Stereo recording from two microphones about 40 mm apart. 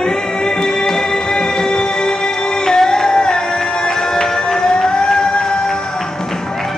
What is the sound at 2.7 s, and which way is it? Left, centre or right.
Music, centre.